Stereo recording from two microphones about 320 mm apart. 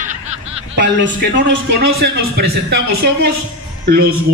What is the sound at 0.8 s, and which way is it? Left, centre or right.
A man's voice, right.